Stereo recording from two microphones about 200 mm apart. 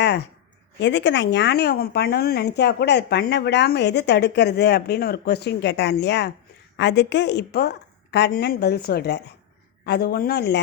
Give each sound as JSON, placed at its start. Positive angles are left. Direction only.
{"t": 0.8, "sound": "a woman's voice", "side_deg": 60}